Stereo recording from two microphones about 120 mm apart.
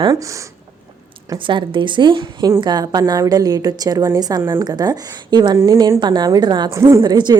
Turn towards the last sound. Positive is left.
turn(degrees=-35)  # may be behind; listen again after turning